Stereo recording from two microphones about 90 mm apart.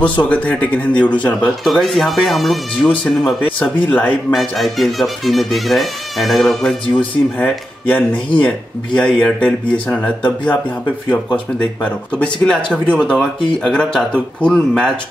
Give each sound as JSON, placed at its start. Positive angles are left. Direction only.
{"t": 0.0, "sound": "speech", "side_deg": 15}
{"t": 1.6, "sound": "speech", "side_deg": 0}
{"t": 3.4, "sound": "speech", "side_deg": 15}
{"t": 4.3, "sound": "speech", "side_deg": 0}
{"t": 7.0, "sound": "speech", "side_deg": 20}
{"t": 12.9, "sound": "speech", "side_deg": 5}